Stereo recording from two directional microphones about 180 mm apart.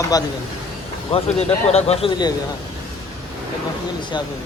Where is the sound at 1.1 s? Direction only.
35° left (ahead or behind).